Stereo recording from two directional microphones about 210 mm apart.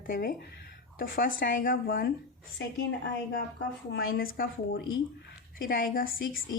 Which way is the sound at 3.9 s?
45° left (ahead or behind).